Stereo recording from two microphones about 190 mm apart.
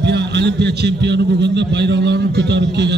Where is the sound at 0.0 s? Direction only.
65° right (ahead or behind).